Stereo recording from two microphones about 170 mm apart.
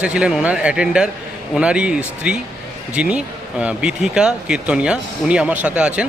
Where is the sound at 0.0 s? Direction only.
5° right (ahead or behind).